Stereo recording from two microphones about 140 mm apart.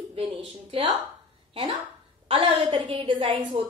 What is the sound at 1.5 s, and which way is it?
Speech, 30° right (ahead or behind).